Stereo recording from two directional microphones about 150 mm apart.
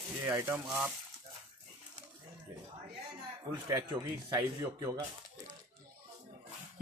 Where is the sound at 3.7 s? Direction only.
25° right (ahead or behind).